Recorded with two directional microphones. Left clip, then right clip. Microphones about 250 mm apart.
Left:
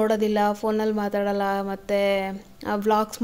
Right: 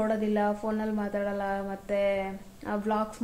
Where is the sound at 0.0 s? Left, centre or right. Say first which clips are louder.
Left 6 dB; left.